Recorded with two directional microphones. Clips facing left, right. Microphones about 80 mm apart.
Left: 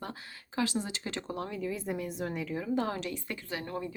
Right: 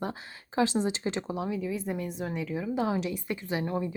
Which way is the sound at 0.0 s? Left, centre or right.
Right.